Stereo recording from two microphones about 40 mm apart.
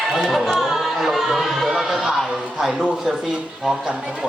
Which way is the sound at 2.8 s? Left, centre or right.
Centre.